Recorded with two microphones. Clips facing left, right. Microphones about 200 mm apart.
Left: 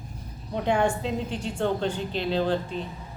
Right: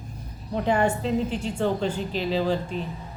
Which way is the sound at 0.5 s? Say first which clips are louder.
Right 1 dB; 5° right (ahead or behind).